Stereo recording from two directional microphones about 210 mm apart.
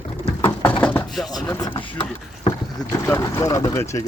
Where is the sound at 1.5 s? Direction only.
10° left (ahead or behind).